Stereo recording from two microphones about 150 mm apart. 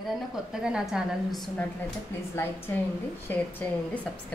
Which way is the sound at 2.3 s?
15° left (ahead or behind).